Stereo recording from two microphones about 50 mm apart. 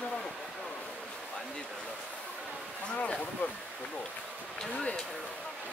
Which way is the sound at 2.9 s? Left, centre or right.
Left.